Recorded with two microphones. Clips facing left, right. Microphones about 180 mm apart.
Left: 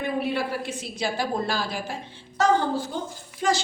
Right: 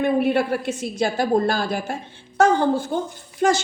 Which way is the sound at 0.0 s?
55° right (ahead or behind).